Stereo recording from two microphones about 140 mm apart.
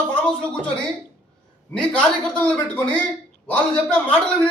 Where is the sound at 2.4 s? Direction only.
10° left (ahead or behind).